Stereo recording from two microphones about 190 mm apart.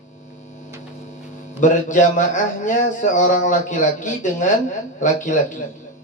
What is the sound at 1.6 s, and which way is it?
Speech, 40° left (ahead or behind).